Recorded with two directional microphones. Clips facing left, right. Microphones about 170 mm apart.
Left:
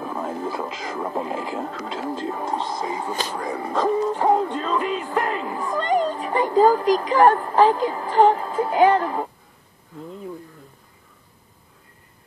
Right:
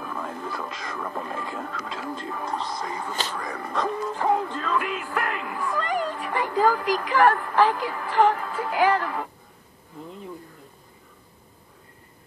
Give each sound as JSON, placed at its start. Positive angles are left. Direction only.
{"t": 0.0, "sound": "radio", "side_deg": 30}
{"t": 3.1, "sound": "speech", "side_deg": 10}
{"t": 3.8, "sound": "music", "side_deg": 35}